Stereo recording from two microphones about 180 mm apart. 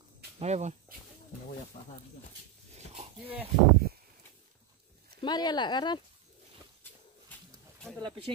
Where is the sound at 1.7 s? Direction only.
30° left (ahead or behind).